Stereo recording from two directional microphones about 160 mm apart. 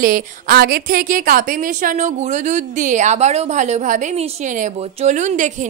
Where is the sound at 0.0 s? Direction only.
60° right (ahead or behind).